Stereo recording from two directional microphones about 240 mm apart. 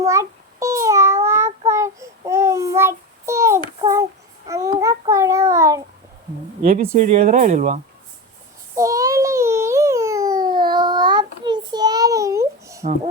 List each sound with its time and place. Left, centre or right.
0.0 s child singing: centre
6.6 s speech: right
8.7 s a sound: centre